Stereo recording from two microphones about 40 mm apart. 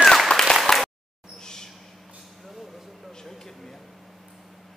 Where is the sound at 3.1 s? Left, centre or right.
Centre.